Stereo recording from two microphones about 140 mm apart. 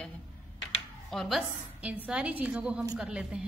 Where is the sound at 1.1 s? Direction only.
5° left (ahead or behind).